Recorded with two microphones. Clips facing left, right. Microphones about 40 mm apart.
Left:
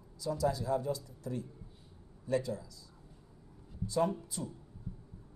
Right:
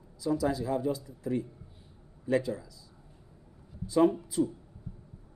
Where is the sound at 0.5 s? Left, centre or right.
Right.